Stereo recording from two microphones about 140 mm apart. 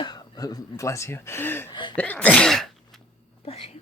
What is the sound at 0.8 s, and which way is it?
Speech, 20° left (ahead or behind).